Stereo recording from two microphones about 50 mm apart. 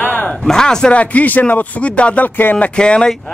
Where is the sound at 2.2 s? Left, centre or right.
Left.